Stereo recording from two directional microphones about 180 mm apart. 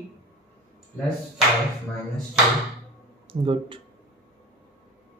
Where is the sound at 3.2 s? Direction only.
30° right (ahead or behind).